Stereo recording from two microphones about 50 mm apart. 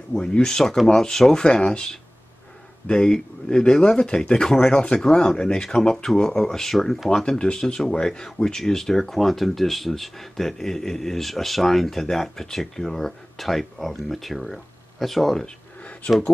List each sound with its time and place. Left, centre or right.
0.1 s speech: left
2.9 s speech: centre
15.8 s a sound: left